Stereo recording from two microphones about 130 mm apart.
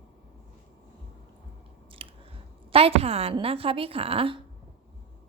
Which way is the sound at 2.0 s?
45° right (ahead or behind).